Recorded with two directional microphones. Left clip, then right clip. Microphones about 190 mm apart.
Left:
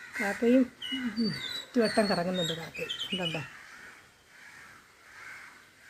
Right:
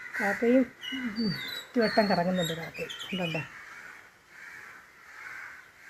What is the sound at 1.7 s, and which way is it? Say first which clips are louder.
Speech: right 2 dB; 10° left (ahead or behind).